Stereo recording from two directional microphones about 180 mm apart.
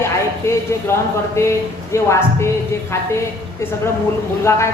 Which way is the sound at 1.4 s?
15° left (ahead or behind).